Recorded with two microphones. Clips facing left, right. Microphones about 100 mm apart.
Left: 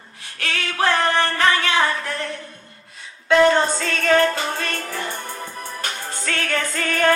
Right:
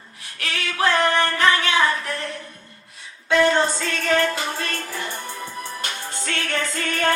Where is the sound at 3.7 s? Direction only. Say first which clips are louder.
Left 3 dB; 40° left (ahead or behind).